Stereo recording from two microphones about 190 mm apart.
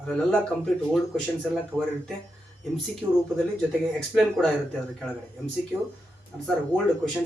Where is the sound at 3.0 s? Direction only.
15° right (ahead or behind).